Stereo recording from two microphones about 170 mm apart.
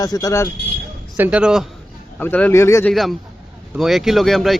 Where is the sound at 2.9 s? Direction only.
Centre (ahead or behind).